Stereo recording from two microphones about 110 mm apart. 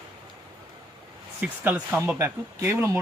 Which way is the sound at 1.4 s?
15° right (ahead or behind).